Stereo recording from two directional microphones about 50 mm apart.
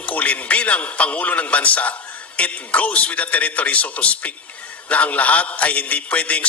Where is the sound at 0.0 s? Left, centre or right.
Left.